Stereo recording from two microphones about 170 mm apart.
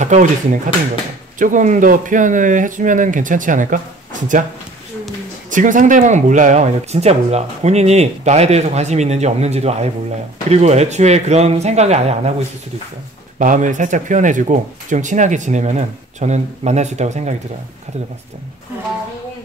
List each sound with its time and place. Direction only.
0.0 s speech: 45° right (ahead or behind)
5.5 s speech: 50° right (ahead or behind)